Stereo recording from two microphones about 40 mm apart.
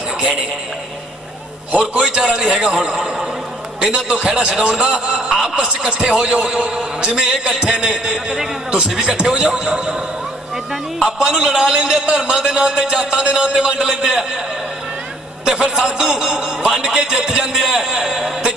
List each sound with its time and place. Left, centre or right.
1.8 s a man's voice: centre
7.8 s a man's voice: centre
11.0 s a man's voice: right
15.4 s a man's voice: centre